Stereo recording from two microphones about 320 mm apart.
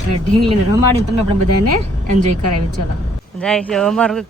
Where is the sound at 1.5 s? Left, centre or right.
Right.